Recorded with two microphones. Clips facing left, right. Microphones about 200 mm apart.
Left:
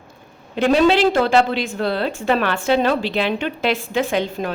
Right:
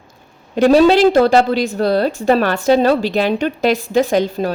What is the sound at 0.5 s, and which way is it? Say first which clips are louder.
A woman's voice: right 5 dB; 40° right (ahead or behind).